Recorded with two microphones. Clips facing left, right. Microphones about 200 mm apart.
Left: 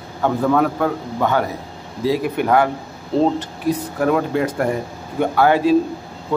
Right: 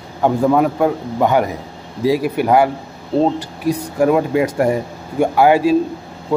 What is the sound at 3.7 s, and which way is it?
Speech, 15° right (ahead or behind).